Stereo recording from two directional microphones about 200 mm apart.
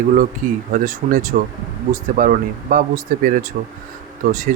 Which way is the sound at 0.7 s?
40° right (ahead or behind).